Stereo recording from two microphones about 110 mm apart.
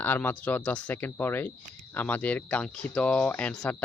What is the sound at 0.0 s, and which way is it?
Speech, 20° left (ahead or behind).